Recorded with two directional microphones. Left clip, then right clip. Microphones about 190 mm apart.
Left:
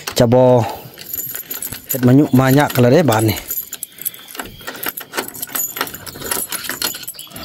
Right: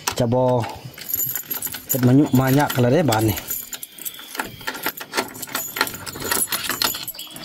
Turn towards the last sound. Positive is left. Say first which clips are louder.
# even
turn(degrees=25)  # may be behind; listen again after turning